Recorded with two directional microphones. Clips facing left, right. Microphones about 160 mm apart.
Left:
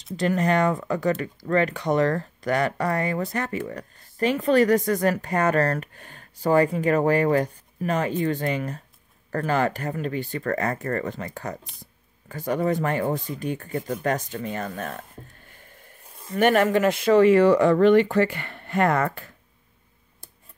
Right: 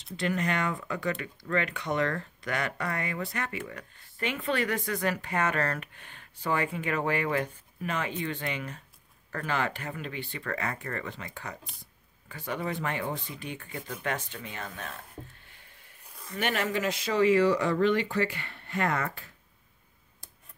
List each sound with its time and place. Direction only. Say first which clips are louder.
0.2 s speech: left 8 dB; 40° left (ahead or behind)